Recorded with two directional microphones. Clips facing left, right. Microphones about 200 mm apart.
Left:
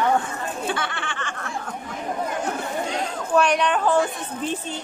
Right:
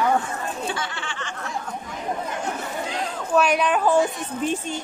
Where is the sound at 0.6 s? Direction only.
60° left (ahead or behind).